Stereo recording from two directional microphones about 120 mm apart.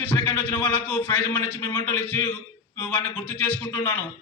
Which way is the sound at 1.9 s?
20° left (ahead or behind).